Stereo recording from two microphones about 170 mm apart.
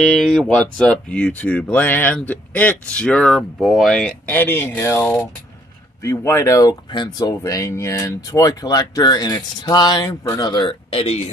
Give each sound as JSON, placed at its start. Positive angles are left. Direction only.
{"t": 0.0, "sound": "speech", "side_deg": 5}
{"t": 5.0, "sound": "speech", "side_deg": 5}
{"t": 6.0, "sound": "speech", "side_deg": 15}